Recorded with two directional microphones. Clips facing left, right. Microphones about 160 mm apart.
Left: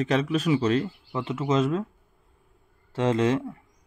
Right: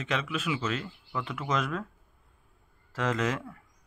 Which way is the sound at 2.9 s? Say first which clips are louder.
Left 7 dB; 25° left (ahead or behind).